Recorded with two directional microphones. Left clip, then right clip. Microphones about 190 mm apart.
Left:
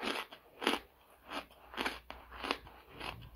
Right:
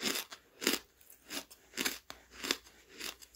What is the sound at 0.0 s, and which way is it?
Crunch, 50° right (ahead or behind).